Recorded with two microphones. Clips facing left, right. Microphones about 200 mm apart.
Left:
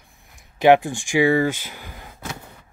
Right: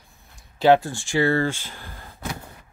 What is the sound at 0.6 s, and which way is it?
Speech, 15° left (ahead or behind).